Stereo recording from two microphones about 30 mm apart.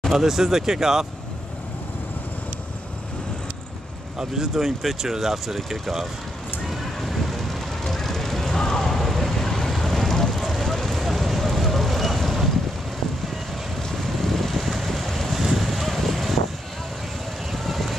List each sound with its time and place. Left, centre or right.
0.1 s speech: centre
4.2 s speech: centre
6.7 s vehicle: centre
11.1 s a sound: centre
11.4 s vehicle: centre
14.2 s vehicle: centre
15.3 s a sound: centre
17.5 s vehicle: centre